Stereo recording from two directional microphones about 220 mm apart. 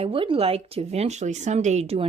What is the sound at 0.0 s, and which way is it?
Speech, 25° right (ahead or behind).